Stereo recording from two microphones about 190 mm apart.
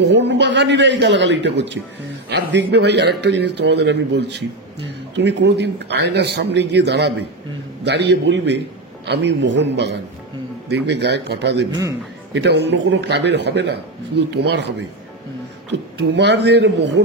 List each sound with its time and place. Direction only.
0.0 s a man's voice: 65° right (ahead or behind)
16.0 s a man's voice: 65° right (ahead or behind)